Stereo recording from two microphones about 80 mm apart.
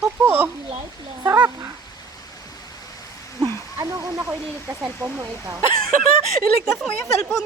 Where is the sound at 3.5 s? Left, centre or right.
Right.